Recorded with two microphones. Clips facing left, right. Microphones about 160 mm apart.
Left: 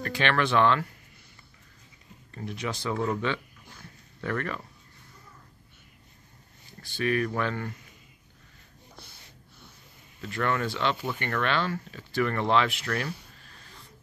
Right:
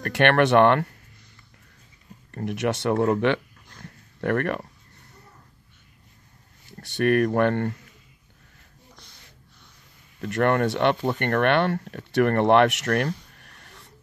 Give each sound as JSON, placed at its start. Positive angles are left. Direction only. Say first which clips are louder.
{"t": 0.0, "sound": "speech", "louder": "right 7 dB", "side_deg": -60}
{"t": 2.3, "sound": "speech", "louder": "right 8 dB", "side_deg": -70}
{"t": 3.8, "sound": "a sound", "louder": "right 8 dB", "side_deg": -60}
{"t": 6.8, "sound": "speech", "louder": "right 7 dB", "side_deg": -65}
{"t": 8.9, "sound": "snort", "louder": "left 4 dB", "side_deg": 10}
{"t": 10.2, "sound": "speech", "louder": "right 7 dB", "side_deg": -60}
{"t": 13.3, "sound": "a sound", "louder": "right 1 dB", "side_deg": -65}